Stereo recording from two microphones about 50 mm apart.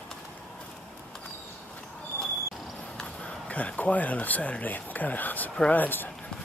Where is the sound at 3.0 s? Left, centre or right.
Left.